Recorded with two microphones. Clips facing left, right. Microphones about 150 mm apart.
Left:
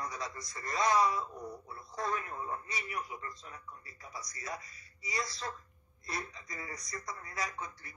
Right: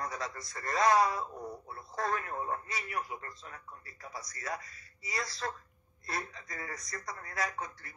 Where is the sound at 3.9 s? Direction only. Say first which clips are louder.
Right 3 dB; centre (ahead or behind).